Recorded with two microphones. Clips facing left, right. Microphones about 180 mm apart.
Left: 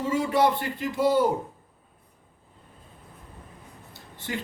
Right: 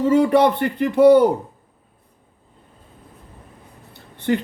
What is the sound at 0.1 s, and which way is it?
Speech, 60° right (ahead or behind).